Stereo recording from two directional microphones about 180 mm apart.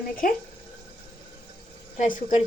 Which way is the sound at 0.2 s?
50° left (ahead or behind).